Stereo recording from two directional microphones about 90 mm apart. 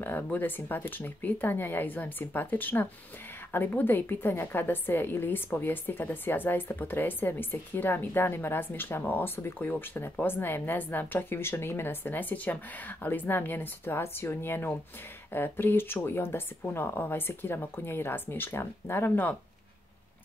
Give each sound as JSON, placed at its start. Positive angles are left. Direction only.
{"t": 0.0, "sound": "a woman's voice", "side_deg": 20}